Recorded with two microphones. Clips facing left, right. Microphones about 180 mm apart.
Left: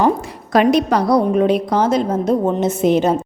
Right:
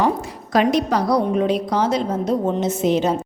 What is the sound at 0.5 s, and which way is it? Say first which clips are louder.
A woman's voice: left 4 dB; 60° left (ahead or behind).